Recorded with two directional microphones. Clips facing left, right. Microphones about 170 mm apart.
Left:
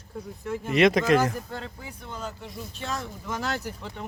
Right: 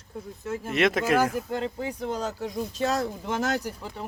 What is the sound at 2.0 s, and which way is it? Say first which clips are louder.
Speech: right 6 dB; 40° right (ahead or behind).